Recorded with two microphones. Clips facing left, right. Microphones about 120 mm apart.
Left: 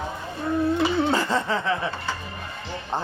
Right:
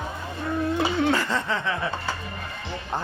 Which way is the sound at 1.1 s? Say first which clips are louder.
Left 1 dB; 30° left (ahead or behind).